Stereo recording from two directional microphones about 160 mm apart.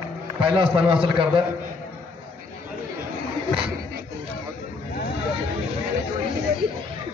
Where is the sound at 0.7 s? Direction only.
35° right (ahead or behind).